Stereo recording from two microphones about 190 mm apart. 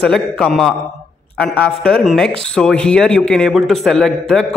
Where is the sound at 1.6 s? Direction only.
Centre (ahead or behind).